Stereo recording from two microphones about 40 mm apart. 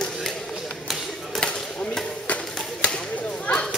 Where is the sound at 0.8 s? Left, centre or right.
Centre.